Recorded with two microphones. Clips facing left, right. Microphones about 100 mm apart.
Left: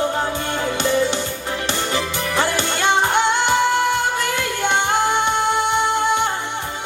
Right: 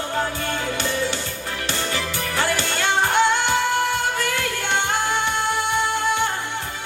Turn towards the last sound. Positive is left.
turn(degrees=20)  # may be behind; listen again after turning